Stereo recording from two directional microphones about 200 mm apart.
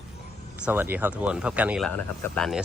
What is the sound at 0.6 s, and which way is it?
Speech, 10° right (ahead or behind).